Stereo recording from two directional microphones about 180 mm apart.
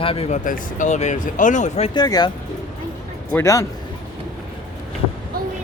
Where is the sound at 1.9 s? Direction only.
20° left (ahead or behind).